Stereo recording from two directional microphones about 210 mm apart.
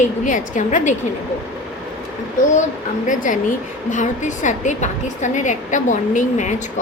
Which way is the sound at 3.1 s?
40° left (ahead or behind).